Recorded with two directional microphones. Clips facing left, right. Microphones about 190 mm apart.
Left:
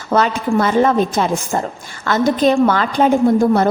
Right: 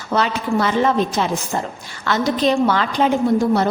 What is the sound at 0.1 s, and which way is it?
A woman's voice, 50° left (ahead or behind).